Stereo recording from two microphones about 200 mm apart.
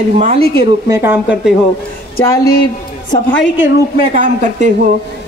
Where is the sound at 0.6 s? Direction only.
15° right (ahead or behind).